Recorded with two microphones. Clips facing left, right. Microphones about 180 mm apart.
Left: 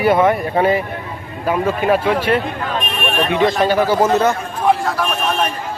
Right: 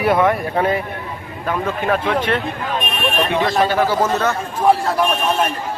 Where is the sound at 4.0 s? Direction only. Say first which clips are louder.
Left 4 dB; 15° left (ahead or behind).